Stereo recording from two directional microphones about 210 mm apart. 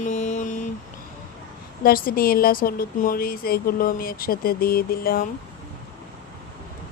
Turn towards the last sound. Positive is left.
turn(degrees=45)  # may be behind; listen again after turning